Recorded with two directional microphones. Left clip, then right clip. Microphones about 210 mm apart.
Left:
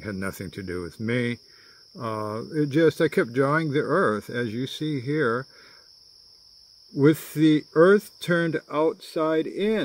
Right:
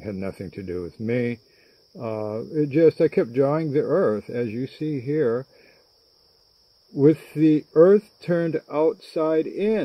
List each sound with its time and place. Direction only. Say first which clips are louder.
0.0 s speech: right 1 dB; 20° left (ahead or behind)
7.0 s speech: right 2 dB; 20° left (ahead or behind)